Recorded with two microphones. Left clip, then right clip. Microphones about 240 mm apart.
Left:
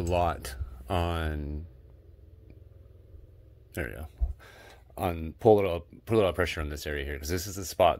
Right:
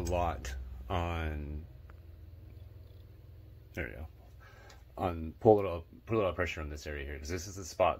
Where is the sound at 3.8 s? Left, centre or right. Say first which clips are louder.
Left 5 dB; left.